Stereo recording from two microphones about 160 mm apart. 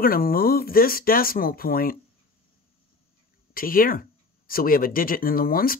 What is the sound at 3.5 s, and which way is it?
Speech, 65° left (ahead or behind).